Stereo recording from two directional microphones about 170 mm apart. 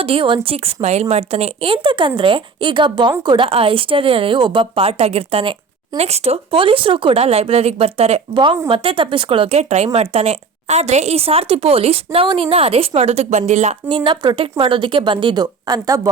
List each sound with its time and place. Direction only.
0.0 s speech: 35° right (ahead or behind)
13.8 s speech: 30° right (ahead or behind)